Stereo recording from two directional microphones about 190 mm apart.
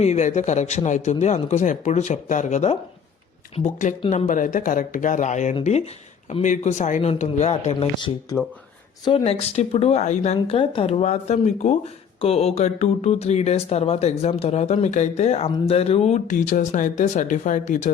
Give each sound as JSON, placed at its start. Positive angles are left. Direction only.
{"t": 0.0, "sound": "speech", "side_deg": 35}